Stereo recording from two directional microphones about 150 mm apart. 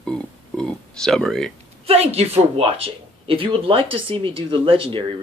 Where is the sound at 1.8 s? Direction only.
45° right (ahead or behind).